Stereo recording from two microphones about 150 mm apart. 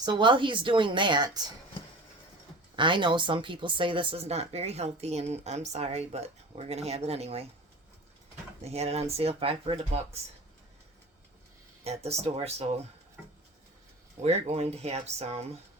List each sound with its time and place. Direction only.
0.0 s a woman's voice: 30° right (ahead or behind)
2.7 s speech: 30° right (ahead or behind)
8.6 s speech: 45° right (ahead or behind)
11.8 s speech: 45° right (ahead or behind)
14.2 s speech: 45° right (ahead or behind)